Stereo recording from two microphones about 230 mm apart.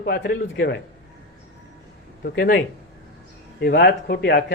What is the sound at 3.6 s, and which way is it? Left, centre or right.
Speech, left.